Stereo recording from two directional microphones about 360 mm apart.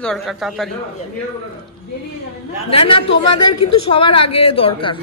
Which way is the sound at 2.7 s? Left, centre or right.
Centre.